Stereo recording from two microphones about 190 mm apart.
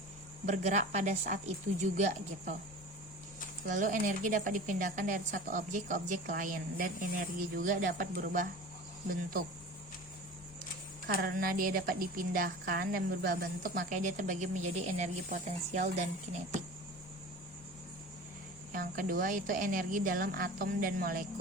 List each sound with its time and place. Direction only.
0.4 s speech: 40° right (ahead or behind)
3.7 s a woman's voice: 40° right (ahead or behind)
11.2 s a woman's voice: 50° right (ahead or behind)
18.7 s a woman's voice: 45° right (ahead or behind)